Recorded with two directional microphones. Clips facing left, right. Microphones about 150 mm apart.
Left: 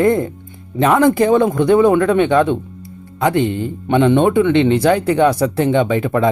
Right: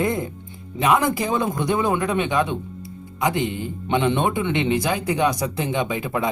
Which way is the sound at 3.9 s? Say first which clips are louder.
Left 8 dB; 60° left (ahead or behind).